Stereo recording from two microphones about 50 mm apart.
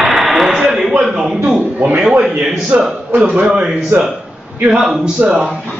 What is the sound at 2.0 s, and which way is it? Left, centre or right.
Speech, centre.